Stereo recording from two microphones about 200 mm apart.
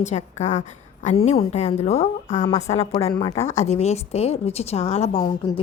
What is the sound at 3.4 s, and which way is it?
Speech, 15° left (ahead or behind).